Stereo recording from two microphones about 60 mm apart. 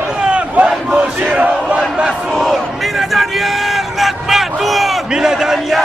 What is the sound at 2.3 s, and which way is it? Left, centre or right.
Crowd, centre.